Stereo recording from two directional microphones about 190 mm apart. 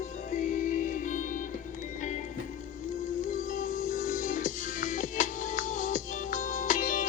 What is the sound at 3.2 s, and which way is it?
Music, 40° left (ahead or behind).